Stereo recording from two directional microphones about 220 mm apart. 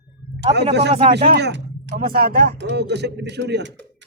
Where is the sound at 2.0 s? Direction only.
40° right (ahead or behind).